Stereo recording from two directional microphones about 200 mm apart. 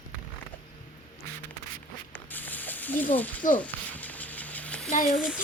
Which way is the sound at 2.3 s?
10° left (ahead or behind).